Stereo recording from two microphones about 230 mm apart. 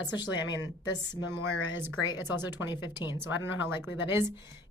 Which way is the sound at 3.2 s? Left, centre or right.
Centre.